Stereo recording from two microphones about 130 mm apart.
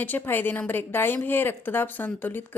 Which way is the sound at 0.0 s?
15° left (ahead or behind).